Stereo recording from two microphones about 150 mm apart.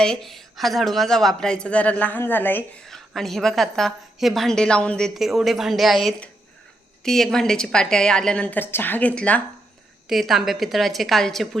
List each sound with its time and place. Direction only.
0.0 s a woman's voice: 5° left (ahead or behind)
2.9 s a woman's voice: centre (ahead or behind)
10.1 s a woman's voice: centre (ahead or behind)